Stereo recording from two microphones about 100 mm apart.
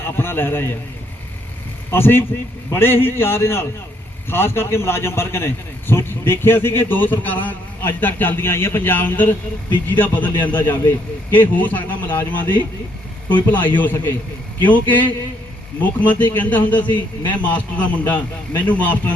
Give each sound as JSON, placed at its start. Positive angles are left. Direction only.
{"t": 0.0, "sound": "a man's voice", "side_deg": 25}
{"t": 1.9, "sound": "a man's voice", "side_deg": 25}
{"t": 16.8, "sound": "a man's voice", "side_deg": 50}
{"t": 17.3, "sound": "a man's voice", "side_deg": 15}